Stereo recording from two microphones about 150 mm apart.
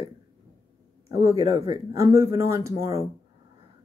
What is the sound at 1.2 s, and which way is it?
Speech, 20° right (ahead or behind).